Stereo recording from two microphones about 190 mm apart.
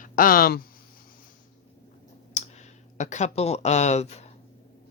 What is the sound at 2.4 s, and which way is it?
Clicking, 35° left (ahead or behind).